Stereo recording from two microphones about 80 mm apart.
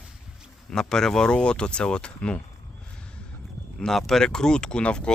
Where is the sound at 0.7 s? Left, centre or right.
Centre.